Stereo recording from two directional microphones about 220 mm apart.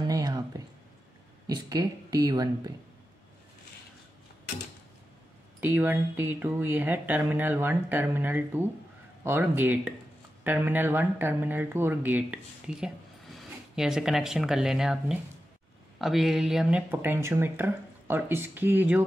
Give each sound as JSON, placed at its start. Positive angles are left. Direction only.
{"t": 0.0, "sound": "a sound", "side_deg": -15}
{"t": 1.5, "sound": "speech", "side_deg": -15}
{"t": 5.6, "sound": "speech", "side_deg": -10}